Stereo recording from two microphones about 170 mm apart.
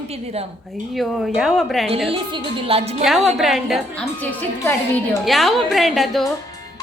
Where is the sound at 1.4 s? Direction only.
Centre (ahead or behind).